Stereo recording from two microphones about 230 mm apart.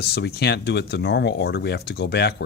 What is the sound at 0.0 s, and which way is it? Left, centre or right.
Speech, left.